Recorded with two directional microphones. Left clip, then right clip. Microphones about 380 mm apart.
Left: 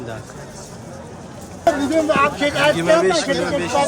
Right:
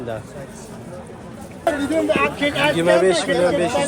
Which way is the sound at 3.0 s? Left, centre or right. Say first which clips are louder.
Right 1 dB; centre.